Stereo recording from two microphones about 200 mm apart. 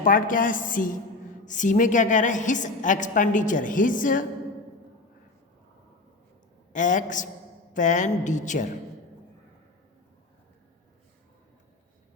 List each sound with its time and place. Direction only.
0.0 s a woman's voice: 40° left (ahead or behind)
6.7 s a woman's voice: 40° left (ahead or behind)